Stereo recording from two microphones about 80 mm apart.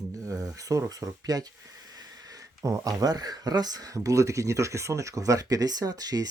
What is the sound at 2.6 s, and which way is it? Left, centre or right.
Speech, right.